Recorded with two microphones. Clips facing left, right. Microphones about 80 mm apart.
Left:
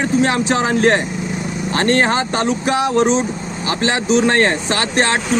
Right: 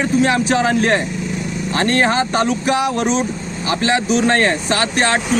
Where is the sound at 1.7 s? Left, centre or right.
Left.